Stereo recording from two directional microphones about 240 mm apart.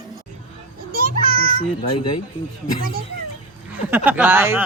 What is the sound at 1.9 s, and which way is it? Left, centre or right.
Speech, left.